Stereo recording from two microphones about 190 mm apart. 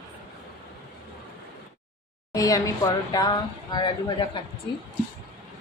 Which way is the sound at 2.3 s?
20° left (ahead or behind).